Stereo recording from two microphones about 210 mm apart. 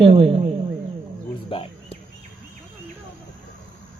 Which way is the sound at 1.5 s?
25° left (ahead or behind).